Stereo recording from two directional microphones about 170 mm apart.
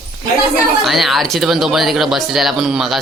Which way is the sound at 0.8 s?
Centre (ahead or behind).